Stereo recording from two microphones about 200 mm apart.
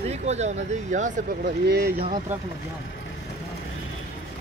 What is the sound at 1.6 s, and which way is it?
Speech, 50° right (ahead or behind).